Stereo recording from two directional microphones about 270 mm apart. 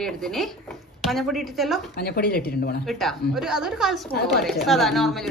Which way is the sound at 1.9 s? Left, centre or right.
Left.